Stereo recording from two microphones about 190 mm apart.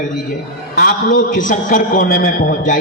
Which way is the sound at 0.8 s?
45° left (ahead or behind).